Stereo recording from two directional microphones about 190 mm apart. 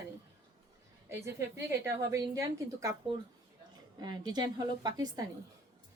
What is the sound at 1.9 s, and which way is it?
A woman's voice, 15° right (ahead or behind).